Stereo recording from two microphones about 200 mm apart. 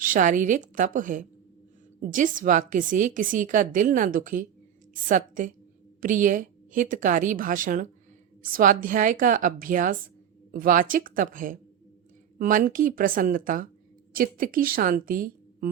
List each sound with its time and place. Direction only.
0.0 s a woman's voice: 40° right (ahead or behind)